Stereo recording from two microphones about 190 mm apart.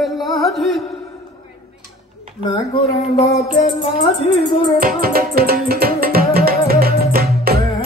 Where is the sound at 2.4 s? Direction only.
25° left (ahead or behind).